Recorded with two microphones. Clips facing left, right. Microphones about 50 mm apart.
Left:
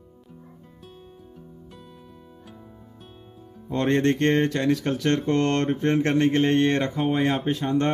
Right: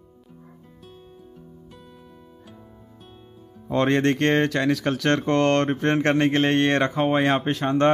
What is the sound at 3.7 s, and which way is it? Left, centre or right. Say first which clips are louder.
Speech: right 1 dB; right.